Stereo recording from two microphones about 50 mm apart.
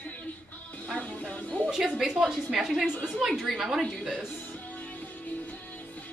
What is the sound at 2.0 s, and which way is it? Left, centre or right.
A woman's voice, centre.